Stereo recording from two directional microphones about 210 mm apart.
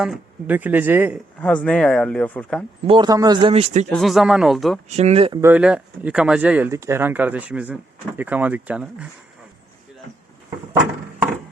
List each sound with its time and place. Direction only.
0.0 s speech: 5° right (ahead or behind)
1.4 s speech: 5° left (ahead or behind)
2.8 s speech: 20° right (ahead or behind)
3.8 s speech: centre (ahead or behind)
4.9 s speech: 30° right (ahead or behind)
5.4 s speech: 10° right (ahead or behind)